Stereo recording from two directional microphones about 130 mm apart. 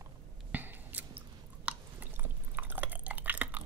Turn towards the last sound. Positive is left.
turn(degrees=-15)  # may be behind; listen again after turning